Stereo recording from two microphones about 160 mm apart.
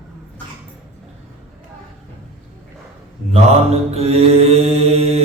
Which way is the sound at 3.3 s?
40° right (ahead or behind).